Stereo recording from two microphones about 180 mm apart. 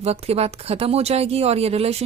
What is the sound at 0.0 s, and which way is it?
A woman's voice, 35° right (ahead or behind).